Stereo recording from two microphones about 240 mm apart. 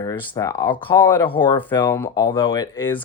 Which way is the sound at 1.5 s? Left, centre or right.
Centre.